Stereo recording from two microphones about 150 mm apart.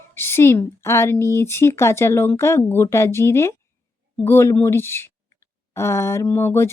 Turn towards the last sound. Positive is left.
turn(degrees=15)  # may be behind; listen again after turning